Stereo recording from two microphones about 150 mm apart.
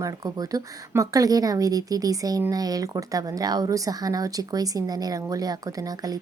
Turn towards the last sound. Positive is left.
turn(degrees=-25)  # may be behind; listen again after turning